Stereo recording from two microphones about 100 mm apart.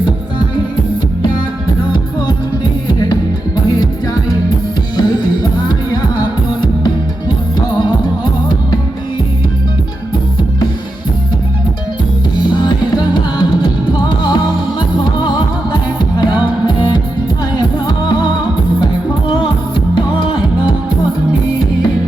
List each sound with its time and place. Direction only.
4.9 s music: 45° left (ahead or behind)
12.5 s music: 50° left (ahead or behind)